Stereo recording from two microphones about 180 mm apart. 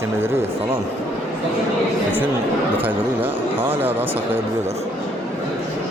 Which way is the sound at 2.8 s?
10° right (ahead or behind).